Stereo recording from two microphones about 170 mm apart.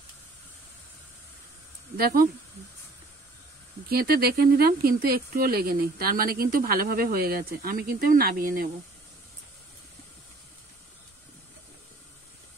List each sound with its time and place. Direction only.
3.9 s speech: 65° right (ahead or behind)